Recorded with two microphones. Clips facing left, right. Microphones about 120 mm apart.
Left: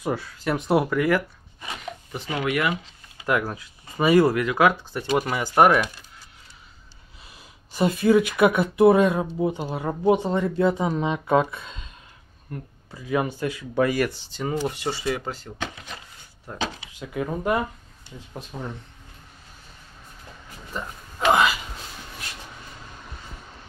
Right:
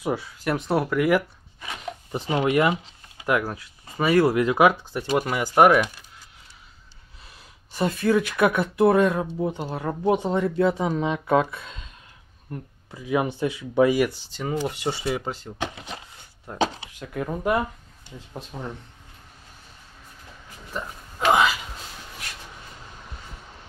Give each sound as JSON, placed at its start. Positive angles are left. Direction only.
{"t": 0.0, "sound": "speech", "side_deg": -10}
{"t": 0.6, "sound": "speech", "side_deg": 5}
{"t": 0.9, "sound": "speech", "side_deg": -10}
{"t": 2.2, "sound": "speech", "side_deg": -25}
{"t": 3.3, "sound": "speech", "side_deg": -5}
{"t": 4.3, "sound": "speech", "side_deg": -20}
{"t": 5.1, "sound": "speech", "side_deg": -5}
{"t": 7.2, "sound": "speech", "side_deg": 10}
{"t": 12.9, "sound": "speech", "side_deg": -15}
{"t": 14.6, "sound": "speech", "side_deg": -15}
{"t": 16.5, "sound": "drawer open or close", "side_deg": -35}
{"t": 17.0, "sound": "speech", "side_deg": 5}
{"t": 21.3, "sound": "speech", "side_deg": 0}